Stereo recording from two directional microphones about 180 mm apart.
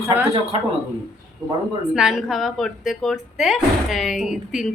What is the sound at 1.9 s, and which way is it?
Speech, 5° right (ahead or behind).